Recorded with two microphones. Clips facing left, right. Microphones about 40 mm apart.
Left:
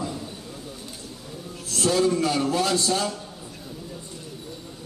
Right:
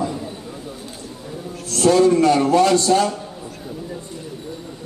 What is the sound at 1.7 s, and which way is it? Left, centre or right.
A man's voice, centre.